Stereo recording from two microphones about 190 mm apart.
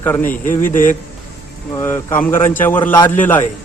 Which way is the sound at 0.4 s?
45° left (ahead or behind).